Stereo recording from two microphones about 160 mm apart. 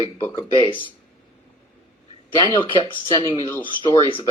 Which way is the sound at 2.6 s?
30° left (ahead or behind).